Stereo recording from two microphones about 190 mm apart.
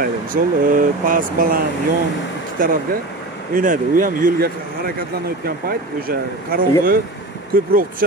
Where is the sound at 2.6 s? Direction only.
45° right (ahead or behind).